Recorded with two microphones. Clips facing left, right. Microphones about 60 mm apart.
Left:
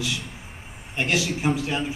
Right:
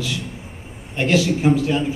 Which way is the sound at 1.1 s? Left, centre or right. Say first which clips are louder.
Right 7 dB; centre.